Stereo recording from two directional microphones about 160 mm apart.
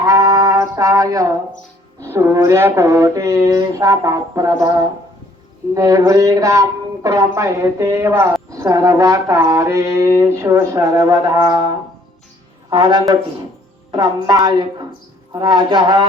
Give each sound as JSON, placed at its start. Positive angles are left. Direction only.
{"t": 0.0, "sound": "music", "side_deg": -20}
{"t": 2.0, "sound": "a woman's voice", "side_deg": -15}
{"t": 12.7, "sound": "a woman's voice", "side_deg": -30}